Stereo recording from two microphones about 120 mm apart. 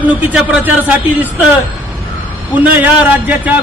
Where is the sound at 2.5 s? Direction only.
15° right (ahead or behind).